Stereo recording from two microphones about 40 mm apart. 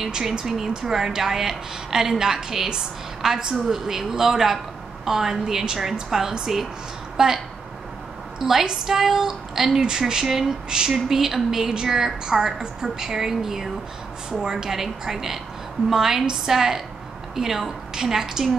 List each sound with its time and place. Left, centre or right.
0.0 s speech: centre
8.4 s speech: centre